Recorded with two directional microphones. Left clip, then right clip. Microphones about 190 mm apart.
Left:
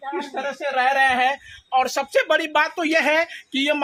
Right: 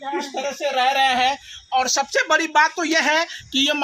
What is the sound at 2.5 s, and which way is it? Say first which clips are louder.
Speech: right 2 dB; 40° left (ahead or behind).